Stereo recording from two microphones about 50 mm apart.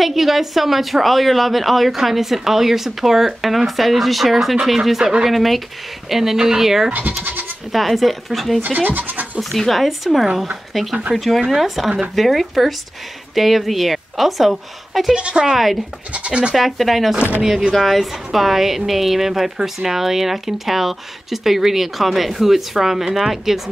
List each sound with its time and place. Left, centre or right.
0.0 s speech: centre
6.9 s speech: right
7.7 s speech: centre
8.6 s speech: right
9.4 s speech: centre
15.1 s speech: centre
15.5 s speech: centre
16.1 s speech: right
16.5 s speech: centre